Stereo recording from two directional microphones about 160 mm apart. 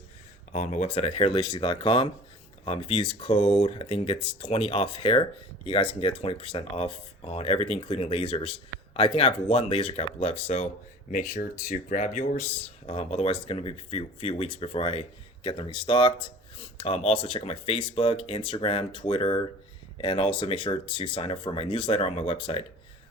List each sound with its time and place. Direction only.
0.5 s speech: 50° left (ahead or behind)
0.9 s speech: 40° left (ahead or behind)
11.1 s speech: 60° left (ahead or behind)
12.8 s speech: 40° left (ahead or behind)